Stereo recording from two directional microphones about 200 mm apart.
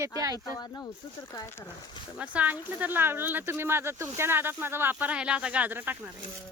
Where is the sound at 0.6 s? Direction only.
15° left (ahead or behind).